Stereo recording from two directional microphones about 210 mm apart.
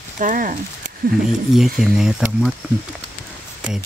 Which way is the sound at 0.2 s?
40° right (ahead or behind).